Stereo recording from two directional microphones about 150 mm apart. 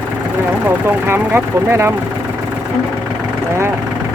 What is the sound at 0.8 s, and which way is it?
Speech, 15° right (ahead or behind).